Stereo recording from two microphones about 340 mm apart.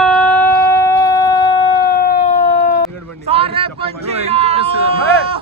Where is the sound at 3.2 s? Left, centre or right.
Centre.